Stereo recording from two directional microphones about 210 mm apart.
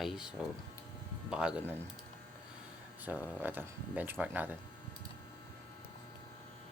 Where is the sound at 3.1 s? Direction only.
10° right (ahead or behind).